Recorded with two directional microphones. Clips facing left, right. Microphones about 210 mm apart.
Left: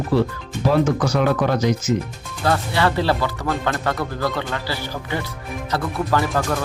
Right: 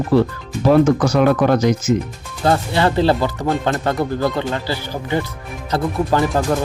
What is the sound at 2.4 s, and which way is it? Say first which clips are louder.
Speech: right 3 dB; 25° right (ahead or behind).